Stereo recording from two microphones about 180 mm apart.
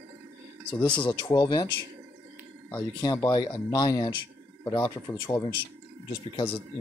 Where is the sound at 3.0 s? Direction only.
20° left (ahead or behind).